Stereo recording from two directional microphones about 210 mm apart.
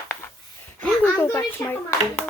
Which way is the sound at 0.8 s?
5° left (ahead or behind).